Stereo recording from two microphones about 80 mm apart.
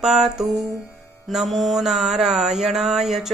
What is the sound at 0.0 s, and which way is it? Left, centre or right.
Mantra, centre.